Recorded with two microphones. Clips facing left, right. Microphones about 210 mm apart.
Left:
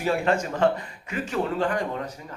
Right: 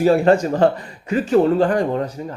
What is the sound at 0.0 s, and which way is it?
Speech, 35° right (ahead or behind).